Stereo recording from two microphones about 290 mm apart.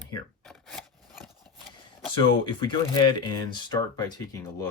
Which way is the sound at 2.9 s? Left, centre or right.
Centre.